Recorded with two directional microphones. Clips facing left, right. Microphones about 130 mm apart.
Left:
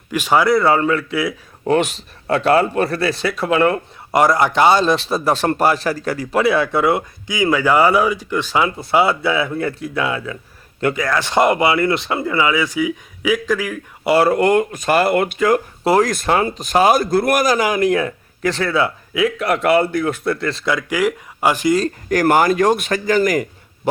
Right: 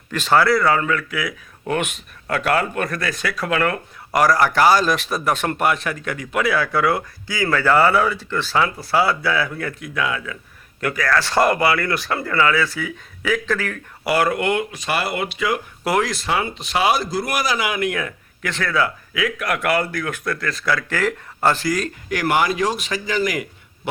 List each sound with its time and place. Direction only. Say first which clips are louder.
0.1 s speech: left 2 dB; 15° left (ahead or behind)
14.0 s a man's voice: left 5 dB; 25° left (ahead or behind); by 15.6 s 45° left (ahead or behind)
15.8 s speech: left 5 dB; 30° left (ahead or behind)
16.0 s speech: left 5 dB; 50° left (ahead or behind); by 21.7 s 15° left (ahead or behind)
22.1 s a man's voice: left 5 dB; 45° left (ahead or behind)